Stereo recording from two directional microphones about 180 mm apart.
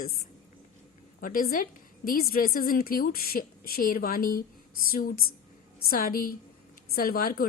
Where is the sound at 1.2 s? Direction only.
50° left (ahead or behind).